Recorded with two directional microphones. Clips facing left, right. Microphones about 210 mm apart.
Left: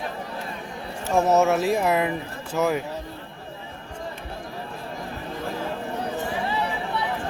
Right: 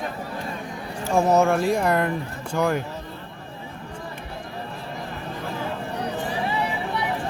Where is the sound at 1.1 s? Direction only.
Centre (ahead or behind).